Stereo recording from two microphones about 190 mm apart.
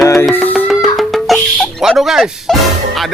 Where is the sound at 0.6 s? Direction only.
Centre (ahead or behind).